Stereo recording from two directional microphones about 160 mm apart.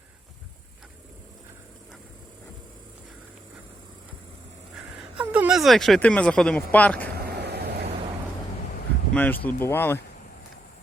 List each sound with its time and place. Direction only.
5.1 s speech: 10° right (ahead or behind); by 7.1 s 10° left (ahead or behind)
7.1 s vehicle: 80° right
9.1 s speech: 10° left (ahead or behind)